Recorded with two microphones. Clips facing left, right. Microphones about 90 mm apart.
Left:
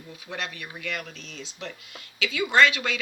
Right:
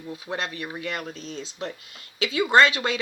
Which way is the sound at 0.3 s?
35° right (ahead or behind).